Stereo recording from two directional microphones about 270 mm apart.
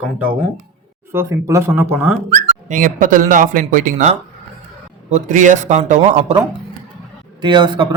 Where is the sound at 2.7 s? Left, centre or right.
Right.